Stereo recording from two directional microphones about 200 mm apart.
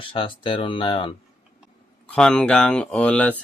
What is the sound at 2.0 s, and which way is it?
Speech, 5° left (ahead or behind).